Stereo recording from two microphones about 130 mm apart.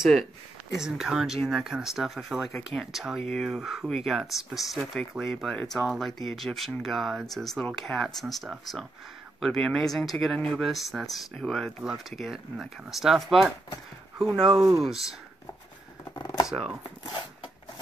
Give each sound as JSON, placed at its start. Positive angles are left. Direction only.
{"t": 0.0, "sound": "speech", "side_deg": 0}
{"t": 14.8, "sound": "speech", "side_deg": -5}
{"t": 16.4, "sound": "speech", "side_deg": -5}
{"t": 17.0, "sound": "a sound", "side_deg": 35}